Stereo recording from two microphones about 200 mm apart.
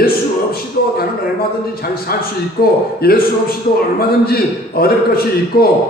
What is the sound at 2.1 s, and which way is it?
A man's voice, 50° left (ahead or behind).